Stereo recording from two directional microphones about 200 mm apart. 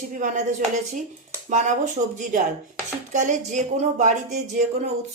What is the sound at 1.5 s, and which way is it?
A woman's voice, 35° right (ahead or behind).